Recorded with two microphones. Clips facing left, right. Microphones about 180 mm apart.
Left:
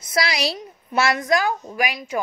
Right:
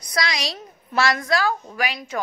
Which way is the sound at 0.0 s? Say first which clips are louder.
Left 3 dB; 25° left (ahead or behind).